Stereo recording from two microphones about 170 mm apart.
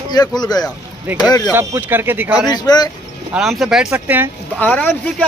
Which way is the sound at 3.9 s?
15° right (ahead or behind).